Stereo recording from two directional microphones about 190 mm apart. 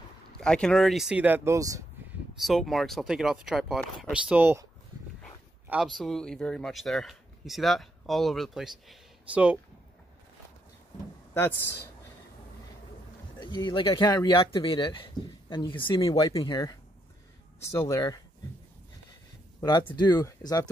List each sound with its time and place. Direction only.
0.4 s speech: 5° left (ahead or behind); by 1.9 s 15° right (ahead or behind)
2.3 s speech: centre (ahead or behind)
5.7 s speech: centre (ahead or behind)
11.3 s speech: 10° left (ahead or behind)
13.4 s speech: 20° left (ahead or behind)
17.7 s speech: 15° left (ahead or behind)
19.6 s speech: 25° left (ahead or behind)